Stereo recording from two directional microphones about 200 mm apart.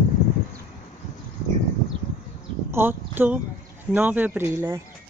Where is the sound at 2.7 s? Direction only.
10° right (ahead or behind).